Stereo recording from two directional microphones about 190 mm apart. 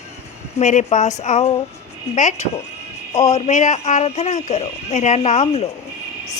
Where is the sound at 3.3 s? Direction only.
35° left (ahead or behind).